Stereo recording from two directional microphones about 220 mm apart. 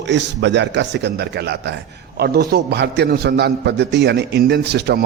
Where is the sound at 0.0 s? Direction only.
55° right (ahead or behind).